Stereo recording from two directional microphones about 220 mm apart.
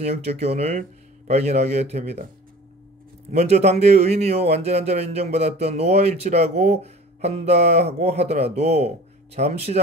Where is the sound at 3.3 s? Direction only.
30° right (ahead or behind).